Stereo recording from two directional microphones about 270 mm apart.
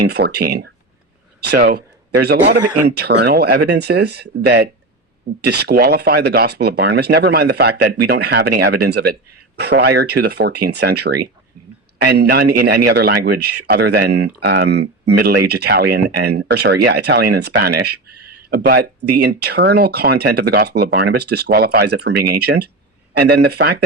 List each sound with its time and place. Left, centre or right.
0.0 s speech: right